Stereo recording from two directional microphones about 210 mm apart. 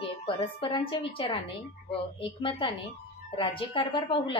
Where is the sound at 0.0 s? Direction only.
25° left (ahead or behind).